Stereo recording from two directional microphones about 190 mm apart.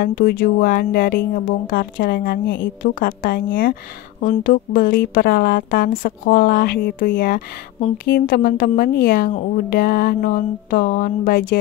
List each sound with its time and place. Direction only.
0.0 s a woman's voice: 50° left (ahead or behind)